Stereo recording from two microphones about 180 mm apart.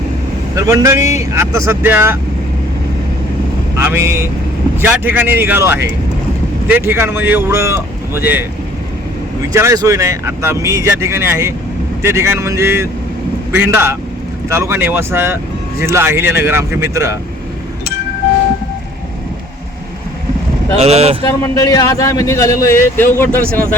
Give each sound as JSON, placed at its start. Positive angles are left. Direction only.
{"t": 0.5, "sound": "speech", "side_deg": -15}
{"t": 3.8, "sound": "speech", "side_deg": -15}
{"t": 9.5, "sound": "speech", "side_deg": -15}
{"t": 20.7, "sound": "speech", "side_deg": -35}
{"t": 21.5, "sound": "a man's voice", "side_deg": 20}